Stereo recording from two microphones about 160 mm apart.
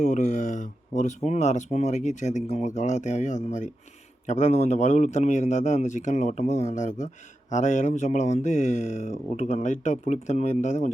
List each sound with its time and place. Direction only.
0.0 s speech: 50° left (ahead or behind)